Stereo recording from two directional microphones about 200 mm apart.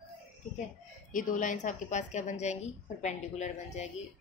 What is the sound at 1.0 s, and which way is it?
A woman's voice, 40° left (ahead or behind).